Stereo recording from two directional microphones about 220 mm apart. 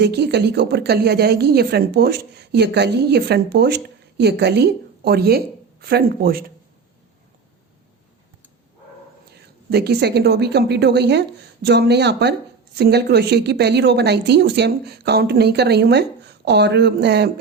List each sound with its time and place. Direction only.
0.0 s a woman's voice: 50° right (ahead or behind)
9.3 s speech: 45° right (ahead or behind)